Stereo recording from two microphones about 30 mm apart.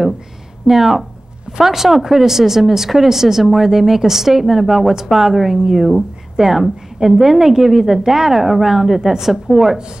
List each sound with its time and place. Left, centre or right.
0.7 s speech: centre
5.8 s speech: centre
6.3 s a woman's voice: centre